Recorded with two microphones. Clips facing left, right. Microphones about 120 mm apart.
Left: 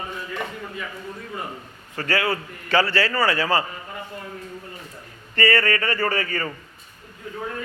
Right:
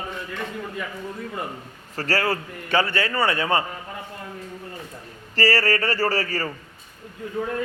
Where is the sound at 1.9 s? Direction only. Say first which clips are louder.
Even; 35° right (ahead or behind).